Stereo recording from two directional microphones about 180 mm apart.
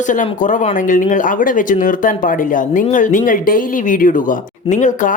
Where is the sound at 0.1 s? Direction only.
45° left (ahead or behind).